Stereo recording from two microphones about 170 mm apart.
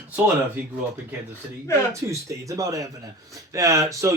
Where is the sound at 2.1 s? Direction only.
20° right (ahead or behind).